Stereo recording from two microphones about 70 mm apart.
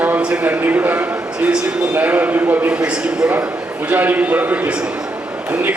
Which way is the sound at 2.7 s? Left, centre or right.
Centre.